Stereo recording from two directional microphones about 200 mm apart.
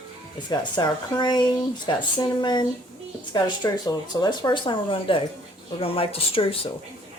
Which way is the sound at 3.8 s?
20° left (ahead or behind).